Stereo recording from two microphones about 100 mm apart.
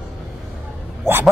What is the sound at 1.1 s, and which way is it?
Bow-wow, 25° right (ahead or behind).